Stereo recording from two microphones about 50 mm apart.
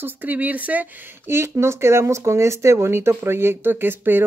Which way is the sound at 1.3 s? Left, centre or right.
Right.